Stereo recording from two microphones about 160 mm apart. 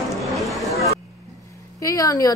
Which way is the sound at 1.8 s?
20° left (ahead or behind).